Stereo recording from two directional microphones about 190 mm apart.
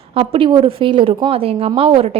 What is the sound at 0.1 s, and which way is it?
A woman's voice, 30° right (ahead or behind).